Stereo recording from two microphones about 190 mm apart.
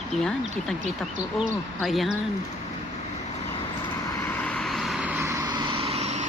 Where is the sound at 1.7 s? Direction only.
Centre (ahead or behind).